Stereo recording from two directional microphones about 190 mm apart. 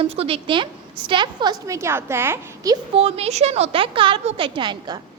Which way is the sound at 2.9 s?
30° right (ahead or behind).